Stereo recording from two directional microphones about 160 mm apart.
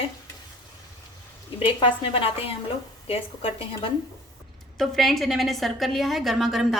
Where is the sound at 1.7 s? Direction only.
30° left (ahead or behind).